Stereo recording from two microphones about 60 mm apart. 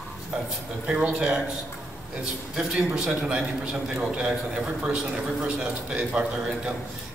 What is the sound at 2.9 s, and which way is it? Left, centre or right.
A man's voice, centre.